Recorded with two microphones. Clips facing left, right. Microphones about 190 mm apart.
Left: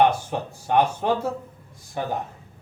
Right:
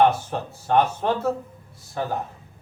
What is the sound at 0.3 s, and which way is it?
Speech, 15° left (ahead or behind).